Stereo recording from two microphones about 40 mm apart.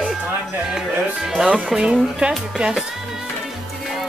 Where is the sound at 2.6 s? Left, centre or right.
Right.